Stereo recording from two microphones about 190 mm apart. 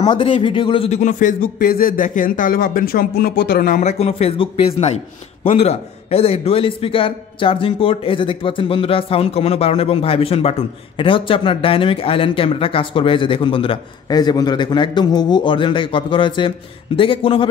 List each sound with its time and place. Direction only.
0.2 s a man's voice: 25° left (ahead or behind); by 3.9 s 45° left (ahead or behind)
4.0 s a man's voice: 30° left (ahead or behind)